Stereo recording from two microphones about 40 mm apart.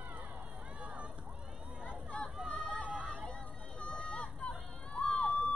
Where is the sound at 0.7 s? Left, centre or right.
Right.